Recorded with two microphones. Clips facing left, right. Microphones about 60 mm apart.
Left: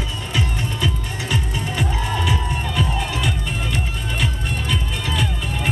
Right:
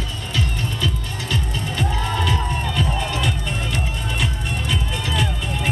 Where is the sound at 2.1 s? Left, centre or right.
Centre.